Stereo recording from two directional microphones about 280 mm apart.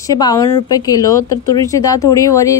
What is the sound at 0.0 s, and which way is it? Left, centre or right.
A woman's voice, centre.